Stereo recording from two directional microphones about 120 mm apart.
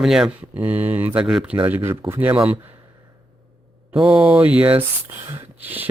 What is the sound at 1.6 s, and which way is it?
Speech, 15° right (ahead or behind).